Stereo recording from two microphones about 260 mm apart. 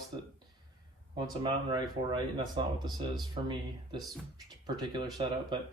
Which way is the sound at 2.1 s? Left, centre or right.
Centre.